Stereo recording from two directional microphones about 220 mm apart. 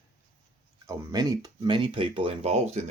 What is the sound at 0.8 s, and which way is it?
Speech, 15° right (ahead or behind).